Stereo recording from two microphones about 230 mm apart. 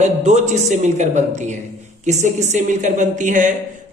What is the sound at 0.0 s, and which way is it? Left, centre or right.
A man's voice, right.